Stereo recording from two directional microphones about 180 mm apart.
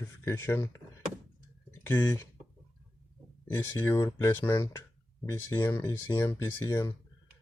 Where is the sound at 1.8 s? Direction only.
15° left (ahead or behind).